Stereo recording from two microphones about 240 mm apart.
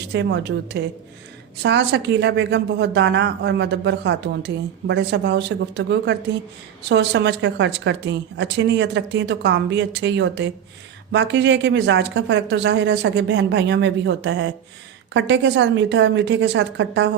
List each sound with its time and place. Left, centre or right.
0.1 s speech: right